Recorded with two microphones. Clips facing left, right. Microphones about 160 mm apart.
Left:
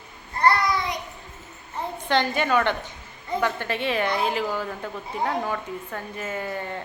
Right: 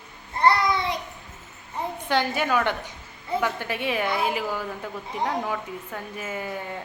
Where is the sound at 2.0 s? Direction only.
10° right (ahead or behind).